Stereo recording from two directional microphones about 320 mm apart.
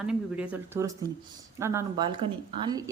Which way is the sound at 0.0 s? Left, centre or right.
Centre.